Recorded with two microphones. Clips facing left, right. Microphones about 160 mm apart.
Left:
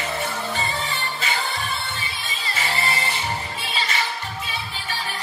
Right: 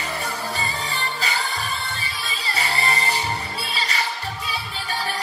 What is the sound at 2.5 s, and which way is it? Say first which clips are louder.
Music: right 1 dB; 35° right (ahead or behind).